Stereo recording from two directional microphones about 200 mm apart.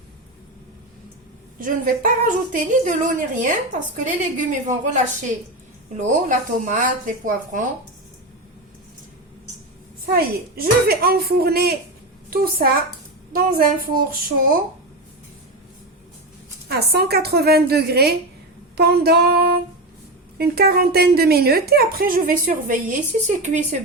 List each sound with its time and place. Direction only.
1.5 s a woman's voice: 45° right (ahead or behind)
10.1 s a woman's voice: 50° right (ahead or behind)
16.6 s a woman's voice: 50° right (ahead or behind)